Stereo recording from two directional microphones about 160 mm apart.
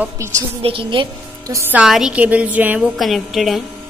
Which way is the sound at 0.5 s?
35° right (ahead or behind).